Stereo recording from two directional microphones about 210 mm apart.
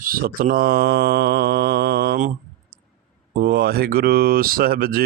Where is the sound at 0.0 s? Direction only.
40° right (ahead or behind).